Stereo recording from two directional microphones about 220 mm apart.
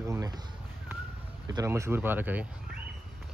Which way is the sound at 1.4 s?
15° right (ahead or behind).